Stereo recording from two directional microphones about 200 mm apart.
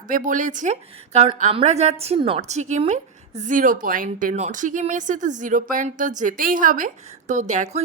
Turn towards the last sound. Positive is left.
turn(degrees=-35)  # may be behind; listen again after turning